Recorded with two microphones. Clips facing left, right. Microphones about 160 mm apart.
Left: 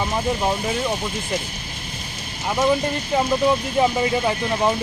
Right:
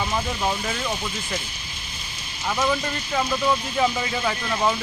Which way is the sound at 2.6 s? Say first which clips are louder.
Left 6 dB; 30° left (ahead or behind).